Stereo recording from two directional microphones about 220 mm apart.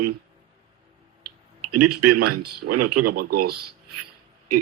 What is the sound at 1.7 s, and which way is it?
Speech, 90° right.